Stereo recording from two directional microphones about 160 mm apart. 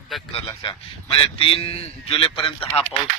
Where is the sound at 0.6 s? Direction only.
35° left (ahead or behind).